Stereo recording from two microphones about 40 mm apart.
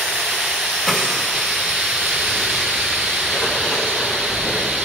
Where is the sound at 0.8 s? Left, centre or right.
Centre.